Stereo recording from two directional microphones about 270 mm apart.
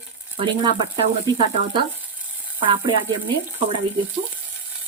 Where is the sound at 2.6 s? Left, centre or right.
Centre.